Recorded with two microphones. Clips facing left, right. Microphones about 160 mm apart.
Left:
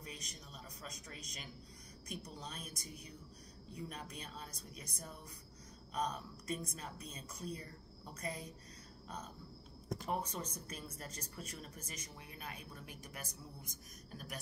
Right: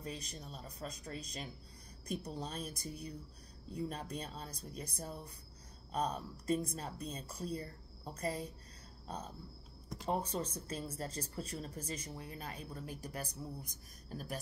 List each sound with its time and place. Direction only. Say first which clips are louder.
0.0 s a woman's voice: right 6 dB; 30° right (ahead or behind)